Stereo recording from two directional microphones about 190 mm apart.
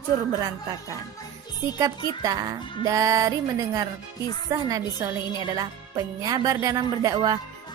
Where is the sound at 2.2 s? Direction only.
20° right (ahead or behind).